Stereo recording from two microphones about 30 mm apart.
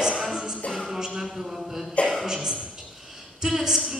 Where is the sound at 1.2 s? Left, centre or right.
Centre.